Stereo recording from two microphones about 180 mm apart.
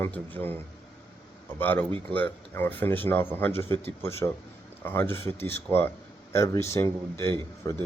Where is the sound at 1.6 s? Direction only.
10° left (ahead or behind).